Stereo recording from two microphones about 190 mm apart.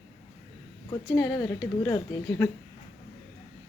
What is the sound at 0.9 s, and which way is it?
A woman's voice, 15° left (ahead or behind).